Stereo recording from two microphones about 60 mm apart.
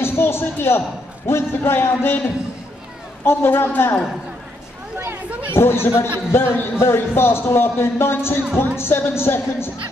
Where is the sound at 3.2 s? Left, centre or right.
Left.